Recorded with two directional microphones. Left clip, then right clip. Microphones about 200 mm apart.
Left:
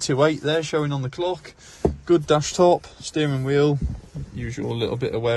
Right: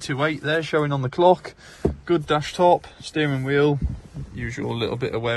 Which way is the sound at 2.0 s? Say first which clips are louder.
Left 3 dB; 20° left (ahead or behind).